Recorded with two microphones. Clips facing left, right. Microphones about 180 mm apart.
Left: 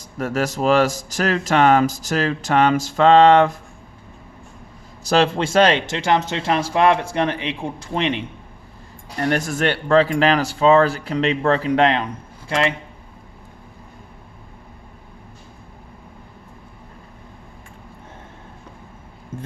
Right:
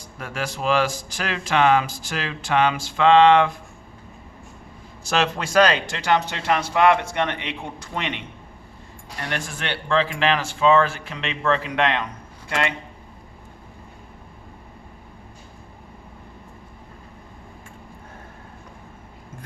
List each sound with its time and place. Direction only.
0.2 s speech: 40° left (ahead or behind)
5.0 s speech: 30° left (ahead or behind)
9.1 s speech: 40° left (ahead or behind)